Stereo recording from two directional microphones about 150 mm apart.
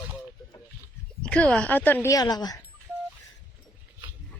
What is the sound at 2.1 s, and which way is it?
Speech, 25° left (ahead or behind).